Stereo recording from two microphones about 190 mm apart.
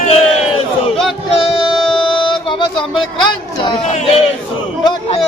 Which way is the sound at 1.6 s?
25° left (ahead or behind).